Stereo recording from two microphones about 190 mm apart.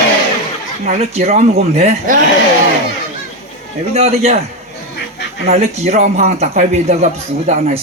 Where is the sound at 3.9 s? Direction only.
35° right (ahead or behind).